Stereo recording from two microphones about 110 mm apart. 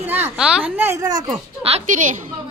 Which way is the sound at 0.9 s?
35° right (ahead or behind).